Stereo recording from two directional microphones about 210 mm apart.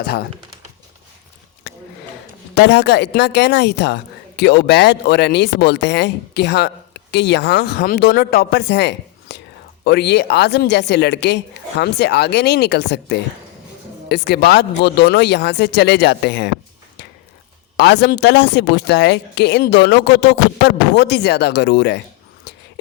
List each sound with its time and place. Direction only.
0.0 s speech: 50° left (ahead or behind)
1.7 s a sound: 50° left (ahead or behind)
2.6 s speech: 55° left (ahead or behind)
17.7 s speech: 55° left (ahead or behind)